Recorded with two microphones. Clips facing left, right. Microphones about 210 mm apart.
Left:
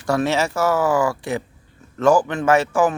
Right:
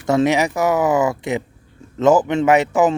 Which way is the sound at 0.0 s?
20° right (ahead or behind).